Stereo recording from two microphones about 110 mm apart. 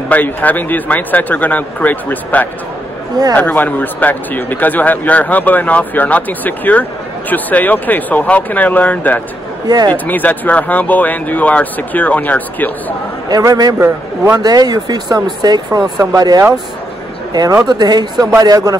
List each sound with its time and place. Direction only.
0.1 s speech: 15° left (ahead or behind)
9.7 s speech: 35° right (ahead or behind)
10.0 s speech: 15° left (ahead or behind)
13.3 s speech: 35° right (ahead or behind)
13.7 s a man's voice: 15° right (ahead or behind)
14.4 s speech: 40° right (ahead or behind)